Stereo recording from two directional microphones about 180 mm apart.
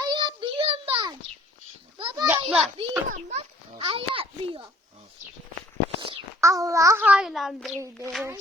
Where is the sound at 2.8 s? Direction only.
40° right (ahead or behind).